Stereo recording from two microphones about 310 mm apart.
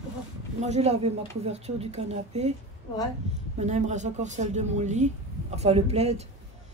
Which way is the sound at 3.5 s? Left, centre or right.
Right.